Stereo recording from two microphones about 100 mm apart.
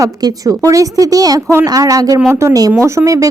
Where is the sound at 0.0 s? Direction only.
35° right (ahead or behind).